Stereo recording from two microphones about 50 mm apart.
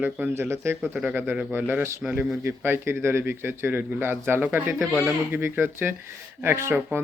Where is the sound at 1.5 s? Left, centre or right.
Right.